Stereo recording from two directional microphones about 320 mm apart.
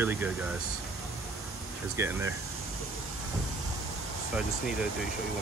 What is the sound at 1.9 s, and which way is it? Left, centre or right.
Speech, centre.